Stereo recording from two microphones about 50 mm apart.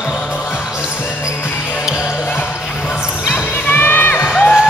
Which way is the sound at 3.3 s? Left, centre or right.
Left.